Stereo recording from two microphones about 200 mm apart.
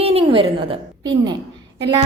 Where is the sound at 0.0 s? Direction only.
30° right (ahead or behind).